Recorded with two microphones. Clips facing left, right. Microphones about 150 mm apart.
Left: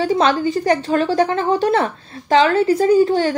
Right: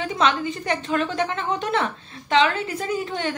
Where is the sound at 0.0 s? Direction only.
35° left (ahead or behind).